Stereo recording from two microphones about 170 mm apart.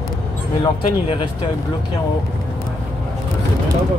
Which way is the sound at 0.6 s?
30° left (ahead or behind).